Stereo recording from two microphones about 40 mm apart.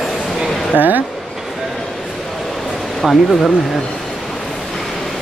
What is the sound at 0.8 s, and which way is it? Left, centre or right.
Speech, right.